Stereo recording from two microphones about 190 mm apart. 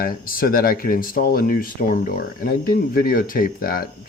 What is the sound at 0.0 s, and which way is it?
Speech, 50° left (ahead or behind).